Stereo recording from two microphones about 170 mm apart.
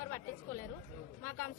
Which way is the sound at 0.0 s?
15° left (ahead or behind).